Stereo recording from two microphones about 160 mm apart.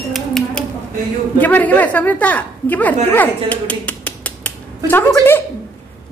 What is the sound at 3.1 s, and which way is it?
Dishes, 10° left (ahead or behind).